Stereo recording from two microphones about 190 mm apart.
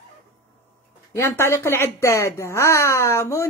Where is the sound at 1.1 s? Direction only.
15° left (ahead or behind).